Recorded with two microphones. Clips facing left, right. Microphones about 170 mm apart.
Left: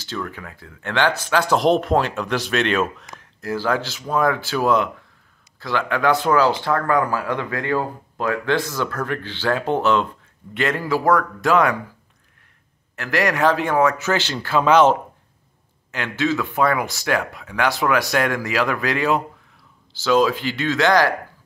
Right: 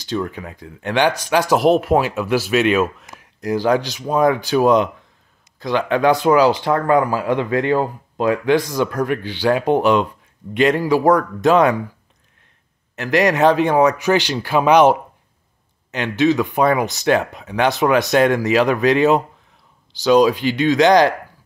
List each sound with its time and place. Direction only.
0.0 s speech: 15° right (ahead or behind)
3.3 s speech: 15° right (ahead or behind)
12.9 s speech: 20° right (ahead or behind)